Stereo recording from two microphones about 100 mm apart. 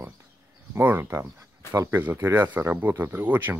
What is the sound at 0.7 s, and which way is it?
Speech, 20° right (ahead or behind).